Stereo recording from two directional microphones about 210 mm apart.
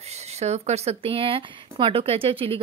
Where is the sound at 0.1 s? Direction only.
30° right (ahead or behind).